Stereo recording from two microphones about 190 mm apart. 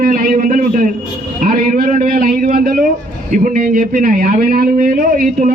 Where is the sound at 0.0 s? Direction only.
50° right (ahead or behind).